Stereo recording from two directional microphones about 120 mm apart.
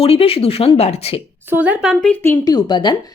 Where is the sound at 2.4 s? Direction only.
35° left (ahead or behind).